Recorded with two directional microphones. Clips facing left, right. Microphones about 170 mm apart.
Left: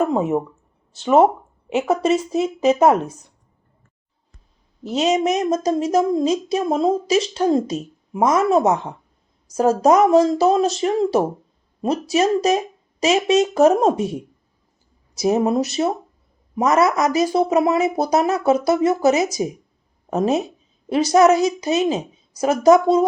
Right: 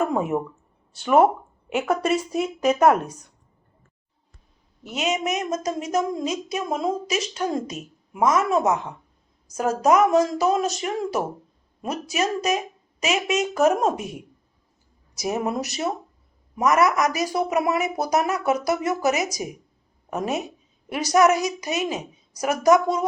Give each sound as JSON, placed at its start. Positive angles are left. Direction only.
{"t": 0.1, "sound": "speech", "side_deg": 20}
{"t": 4.8, "sound": "a woman's voice", "side_deg": 30}